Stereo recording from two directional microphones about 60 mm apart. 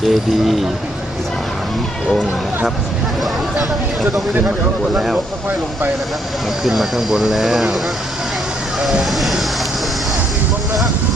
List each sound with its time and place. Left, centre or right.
0.1 s speech: centre
5.1 s speech: right
6.7 s speech: centre
8.8 s vehicle: centre